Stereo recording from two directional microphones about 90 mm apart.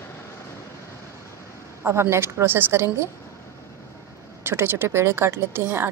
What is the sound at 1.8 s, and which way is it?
Speech, 30° right (ahead or behind).